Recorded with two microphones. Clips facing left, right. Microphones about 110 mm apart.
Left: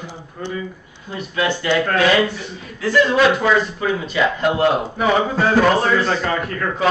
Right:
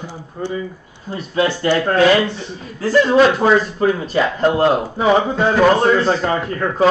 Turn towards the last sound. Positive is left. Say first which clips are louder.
# right 4 dB
turn(degrees=-25)  # may be behind; listen again after turning